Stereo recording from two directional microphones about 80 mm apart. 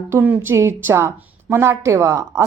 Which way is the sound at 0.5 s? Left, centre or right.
Right.